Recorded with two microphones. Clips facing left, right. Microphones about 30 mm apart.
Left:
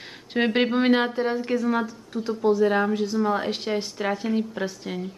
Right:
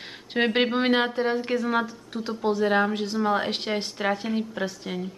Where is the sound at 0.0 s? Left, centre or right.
Centre.